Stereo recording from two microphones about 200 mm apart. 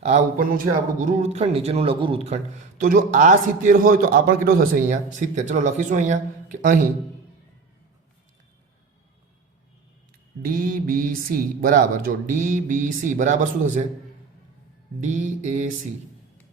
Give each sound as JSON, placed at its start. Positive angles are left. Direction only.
{"t": 0.3, "sound": "a man's voice", "side_deg": -40}
{"t": 10.4, "sound": "a man's voice", "side_deg": -45}
{"t": 15.0, "sound": "mantra", "side_deg": -35}